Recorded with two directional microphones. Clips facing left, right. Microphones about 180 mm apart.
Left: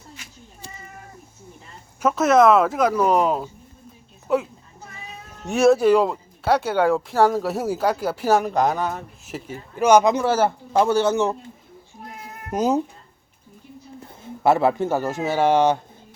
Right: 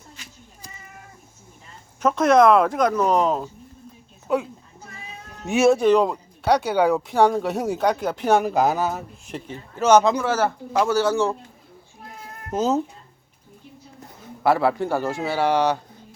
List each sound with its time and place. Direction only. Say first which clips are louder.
2.0 s speech: even; 5° left (ahead or behind)
5.5 s speech: left 1 dB; centre (ahead or behind); by 10.2 s 15° left (ahead or behind)
10.2 s speech: left 2 dB; 25° left (ahead or behind)
12.5 s speech: left 1 dB; 15° left (ahead or behind)
14.1 s speech: left 2 dB; 25° left (ahead or behind)